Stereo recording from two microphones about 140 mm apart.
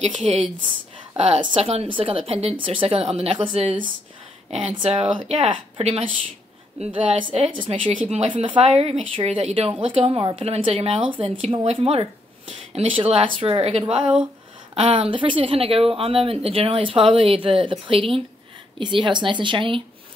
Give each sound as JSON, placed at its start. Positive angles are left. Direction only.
{"t": 0.0, "sound": "speech", "side_deg": -45}
{"t": 6.8, "sound": "speech", "side_deg": -35}